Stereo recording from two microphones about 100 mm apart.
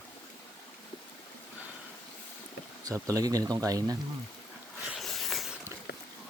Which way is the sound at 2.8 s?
35° right (ahead or behind).